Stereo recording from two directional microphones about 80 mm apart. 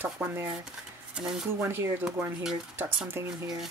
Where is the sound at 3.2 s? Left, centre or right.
Right.